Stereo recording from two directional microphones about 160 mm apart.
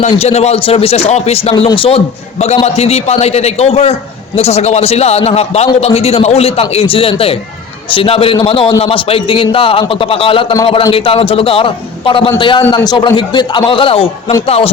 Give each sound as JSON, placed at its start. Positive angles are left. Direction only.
{"t": 0.0, "sound": "a man's voice", "side_deg": 40}